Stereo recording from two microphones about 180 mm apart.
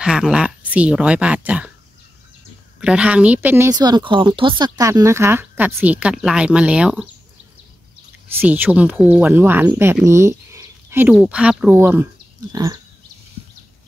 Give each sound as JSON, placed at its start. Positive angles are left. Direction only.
{"t": 0.0, "sound": "speech", "side_deg": -5}
{"t": 2.8, "sound": "speech", "side_deg": -5}
{"t": 8.4, "sound": "speech", "side_deg": -10}
{"t": 12.5, "sound": "a sound", "side_deg": -20}